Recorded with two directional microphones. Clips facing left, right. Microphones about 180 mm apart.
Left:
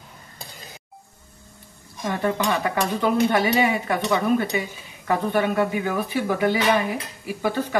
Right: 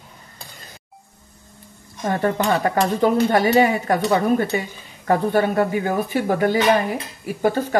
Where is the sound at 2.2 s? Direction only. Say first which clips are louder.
Right 3 dB; 45° right (ahead or behind).